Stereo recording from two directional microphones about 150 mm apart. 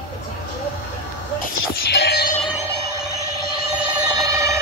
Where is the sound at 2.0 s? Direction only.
90° left.